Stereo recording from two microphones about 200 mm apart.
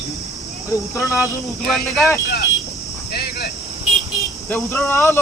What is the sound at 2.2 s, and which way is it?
Speech, 55° left (ahead or behind).